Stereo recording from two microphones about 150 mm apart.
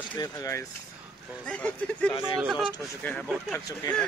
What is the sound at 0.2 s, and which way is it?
Speech, 20° left (ahead or behind).